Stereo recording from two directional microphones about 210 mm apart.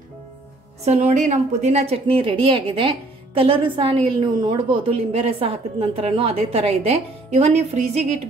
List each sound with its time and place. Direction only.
0.8 s a woman's voice: 30° right (ahead or behind)